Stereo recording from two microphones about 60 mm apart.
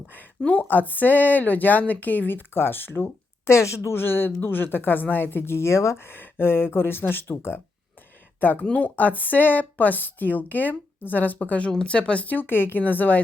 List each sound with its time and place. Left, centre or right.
0.1 s speech: left
3.9 s speech: left